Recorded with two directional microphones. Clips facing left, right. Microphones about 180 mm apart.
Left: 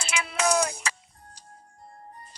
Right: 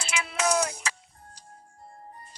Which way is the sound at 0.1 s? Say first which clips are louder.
Left 1 dB; 55° left (ahead or behind).